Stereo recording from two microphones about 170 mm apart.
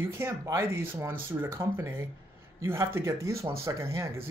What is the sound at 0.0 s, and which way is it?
Speech, 15° right (ahead or behind).